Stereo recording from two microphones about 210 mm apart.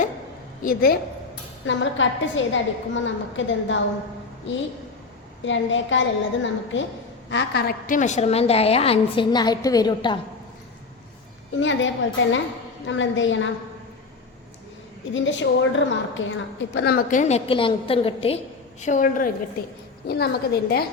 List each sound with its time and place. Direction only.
0.6 s a woman's voice: 45° left (ahead or behind)
1.6 s a woman's voice: 60° left (ahead or behind)
5.5 s a woman's voice: 60° left (ahead or behind); by 10.2 s 20° left (ahead or behind)
11.6 s a woman's voice: 65° left (ahead or behind)
15.1 s a woman's voice: 60° left (ahead or behind); by 18.3 s 25° left (ahead or behind)
18.8 s a woman's voice: 35° left (ahead or behind)